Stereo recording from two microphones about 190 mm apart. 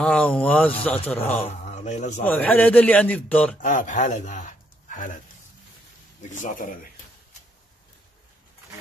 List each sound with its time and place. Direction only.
0.0 s a man's voice: 5° left (ahead or behind)
1.5 s speech: 35° left (ahead or behind)
2.2 s a man's voice: 10° left (ahead or behind)
3.6 s speech: 40° left (ahead or behind)